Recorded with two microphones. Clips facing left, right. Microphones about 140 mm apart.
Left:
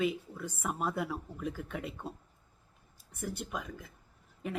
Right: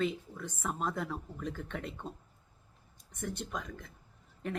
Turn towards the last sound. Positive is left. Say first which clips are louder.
# even
turn(degrees=5)  # may be behind; listen again after turning